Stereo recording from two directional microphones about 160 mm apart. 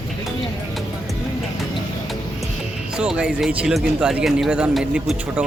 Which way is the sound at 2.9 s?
5° right (ahead or behind).